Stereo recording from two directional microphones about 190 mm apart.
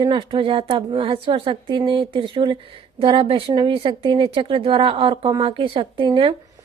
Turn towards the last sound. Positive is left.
turn(degrees=-25)  # may be behind; listen again after turning